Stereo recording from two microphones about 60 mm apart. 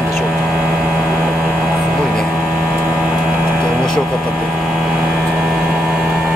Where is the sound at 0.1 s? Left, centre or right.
Centre.